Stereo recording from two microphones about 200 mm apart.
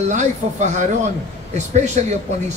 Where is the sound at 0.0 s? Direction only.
35° right (ahead or behind).